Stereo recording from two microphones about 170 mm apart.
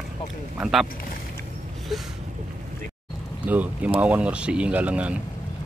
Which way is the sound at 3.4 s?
10° right (ahead or behind).